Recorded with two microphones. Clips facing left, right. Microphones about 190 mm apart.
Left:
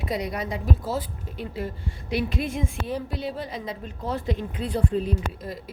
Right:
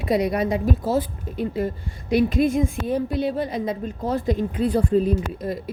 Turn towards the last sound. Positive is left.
turn(degrees=-50)  # may be behind; listen again after turning